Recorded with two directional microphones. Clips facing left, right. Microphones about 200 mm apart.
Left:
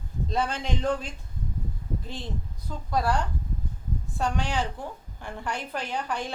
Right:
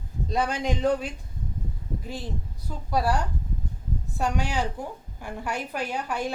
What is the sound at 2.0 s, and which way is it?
A woman's voice, 10° right (ahead or behind).